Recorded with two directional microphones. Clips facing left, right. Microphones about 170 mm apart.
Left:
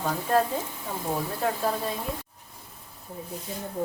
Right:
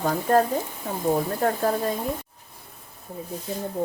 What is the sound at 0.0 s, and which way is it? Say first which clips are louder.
Speech: right 4 dB; 45° right (ahead or behind).